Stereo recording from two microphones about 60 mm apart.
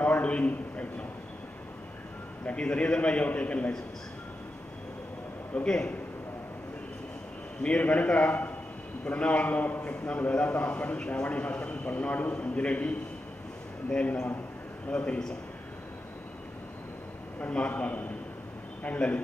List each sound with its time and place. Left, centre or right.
0.0 s a sound: left
2.4 s a man's voice: centre
5.5 s a man's voice: centre
7.6 s a man's voice: centre
17.4 s a man's voice: left